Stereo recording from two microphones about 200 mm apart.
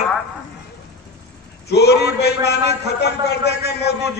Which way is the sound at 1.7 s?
55° left (ahead or behind).